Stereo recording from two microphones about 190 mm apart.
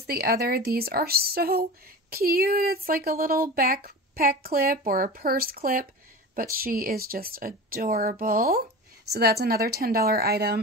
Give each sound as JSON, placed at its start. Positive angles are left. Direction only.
{"t": 0.0, "sound": "speech", "side_deg": -55}